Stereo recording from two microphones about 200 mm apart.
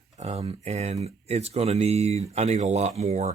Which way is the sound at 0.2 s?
30° right (ahead or behind).